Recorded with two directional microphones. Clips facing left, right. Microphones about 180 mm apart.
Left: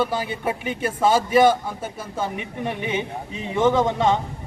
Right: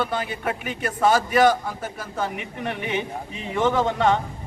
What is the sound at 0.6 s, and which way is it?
A man's voice, 25° left (ahead or behind).